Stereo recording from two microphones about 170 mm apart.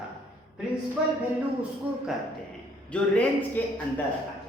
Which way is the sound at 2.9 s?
5° left (ahead or behind).